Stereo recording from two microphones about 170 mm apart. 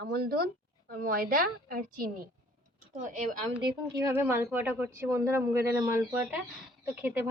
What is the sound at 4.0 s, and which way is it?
Speech, 15° right (ahead or behind).